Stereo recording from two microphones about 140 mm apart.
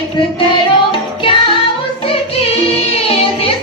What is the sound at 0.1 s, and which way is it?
Music, 35° left (ahead or behind).